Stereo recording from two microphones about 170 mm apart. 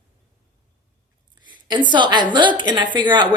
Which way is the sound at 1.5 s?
25° right (ahead or behind).